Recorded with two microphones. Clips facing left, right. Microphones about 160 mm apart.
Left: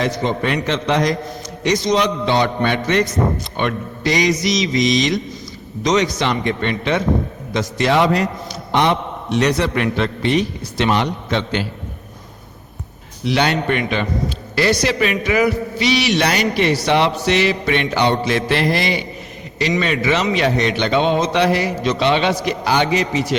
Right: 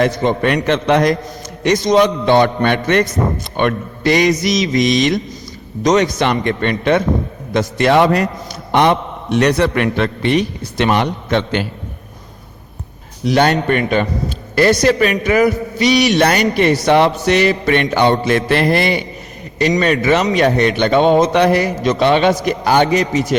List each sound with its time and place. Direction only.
0.0 s a man's voice: 55° right (ahead or behind)
13.2 s a man's voice: 45° right (ahead or behind)